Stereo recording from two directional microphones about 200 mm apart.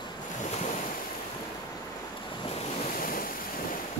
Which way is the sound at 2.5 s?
30° left (ahead or behind).